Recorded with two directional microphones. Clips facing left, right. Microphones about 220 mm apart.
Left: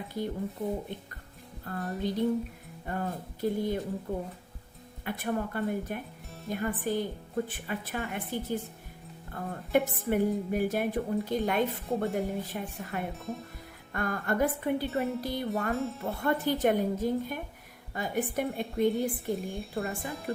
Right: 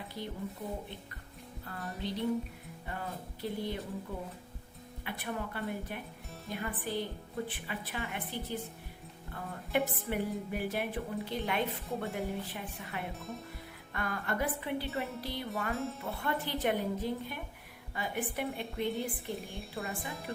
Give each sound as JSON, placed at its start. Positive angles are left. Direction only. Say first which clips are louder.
{"t": 1.6, "sound": "music", "louder": "left 7 dB", "side_deg": 45}
{"t": 13.1, "sound": "a woman's voice", "louder": "left 5 dB", "side_deg": 0}
{"t": 13.9, "sound": "music", "louder": "left 5 dB", "side_deg": 45}
{"t": 15.7, "sound": "a woman's voice", "louder": "left 4 dB", "side_deg": 0}
{"t": 16.2, "sound": "music", "louder": "left 7 dB", "side_deg": 45}
{"t": 18.9, "sound": "a woman's voice", "louder": "left 7 dB", "side_deg": 0}